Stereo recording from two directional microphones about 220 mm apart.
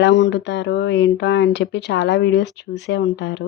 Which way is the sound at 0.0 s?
55° left (ahead or behind).